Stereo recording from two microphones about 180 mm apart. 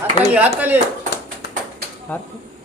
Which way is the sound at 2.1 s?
10° left (ahead or behind).